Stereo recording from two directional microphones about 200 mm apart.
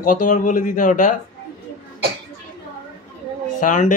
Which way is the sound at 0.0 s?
40° left (ahead or behind).